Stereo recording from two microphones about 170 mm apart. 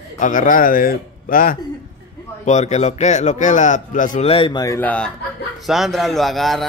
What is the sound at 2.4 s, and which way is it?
A man's voice, 45° left (ahead or behind).